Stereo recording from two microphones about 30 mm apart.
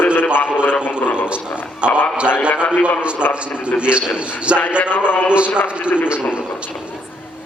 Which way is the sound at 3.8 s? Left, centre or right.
Right.